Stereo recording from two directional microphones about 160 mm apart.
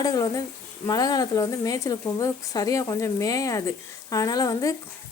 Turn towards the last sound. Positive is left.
turn(degrees=20)  # may be behind; listen again after turning